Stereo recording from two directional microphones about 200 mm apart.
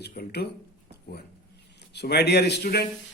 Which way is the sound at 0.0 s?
50° left (ahead or behind).